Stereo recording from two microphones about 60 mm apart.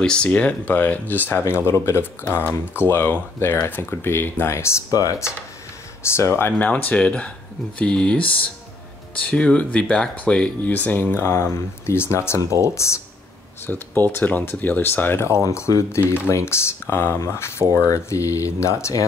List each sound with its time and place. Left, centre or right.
0.0 s speech: centre; by 4.7 s left
6.0 s speech: left
6.6 s speech: left
12.4 s speech: right
12.6 s speech: left
13.7 s speech: left
15.7 s speech: left
16.3 s speech: left
17.8 s speech: left